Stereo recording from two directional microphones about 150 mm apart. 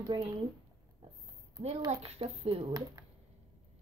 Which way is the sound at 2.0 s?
40° right (ahead or behind).